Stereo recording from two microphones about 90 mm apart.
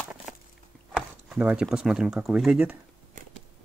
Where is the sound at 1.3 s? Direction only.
10° right (ahead or behind).